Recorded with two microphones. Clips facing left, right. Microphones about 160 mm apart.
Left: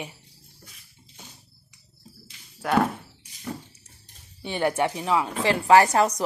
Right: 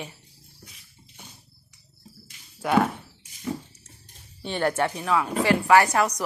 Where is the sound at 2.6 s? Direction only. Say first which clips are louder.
Right 1 dB; centre (ahead or behind).